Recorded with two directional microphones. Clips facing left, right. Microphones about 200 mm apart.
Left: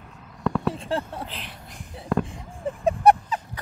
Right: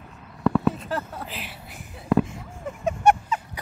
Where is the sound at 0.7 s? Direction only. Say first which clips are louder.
Left 1 dB; 30° left (ahead or behind).